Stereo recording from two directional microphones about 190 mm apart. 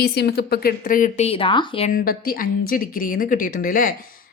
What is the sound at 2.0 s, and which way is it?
A woman's voice, 50° left (ahead or behind).